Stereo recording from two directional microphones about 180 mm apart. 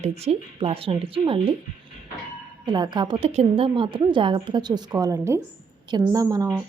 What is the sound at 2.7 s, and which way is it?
A woman's voice, 25° right (ahead or behind).